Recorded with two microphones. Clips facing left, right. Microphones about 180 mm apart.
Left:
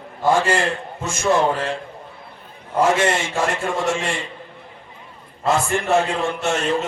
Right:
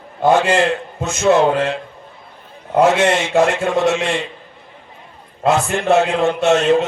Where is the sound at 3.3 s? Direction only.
65° right (ahead or behind).